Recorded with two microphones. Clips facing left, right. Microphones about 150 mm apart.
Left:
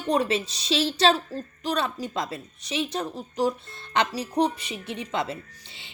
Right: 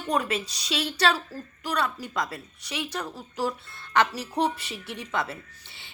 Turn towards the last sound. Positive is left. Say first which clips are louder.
# left 3 dB
turn(degrees=20)  # may be behind; listen again after turning